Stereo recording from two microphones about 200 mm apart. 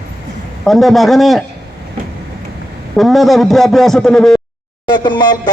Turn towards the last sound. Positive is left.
turn(degrees=20)  # may be behind; listen again after turning